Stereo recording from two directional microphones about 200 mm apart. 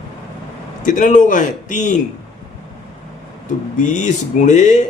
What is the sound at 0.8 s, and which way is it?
A man's voice, 40° left (ahead or behind).